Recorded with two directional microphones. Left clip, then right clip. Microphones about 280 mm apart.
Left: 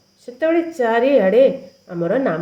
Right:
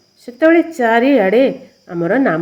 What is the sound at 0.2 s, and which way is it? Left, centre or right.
A woman's voice, right.